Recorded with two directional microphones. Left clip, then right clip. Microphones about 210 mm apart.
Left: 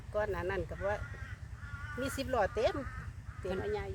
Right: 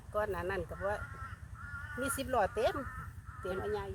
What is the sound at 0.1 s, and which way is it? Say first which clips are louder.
Speech: even; 5° left (ahead or behind).